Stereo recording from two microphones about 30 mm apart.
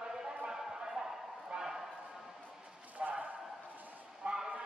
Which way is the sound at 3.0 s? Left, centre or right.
Right.